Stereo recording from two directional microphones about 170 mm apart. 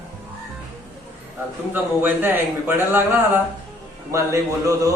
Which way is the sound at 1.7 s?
10° right (ahead or behind).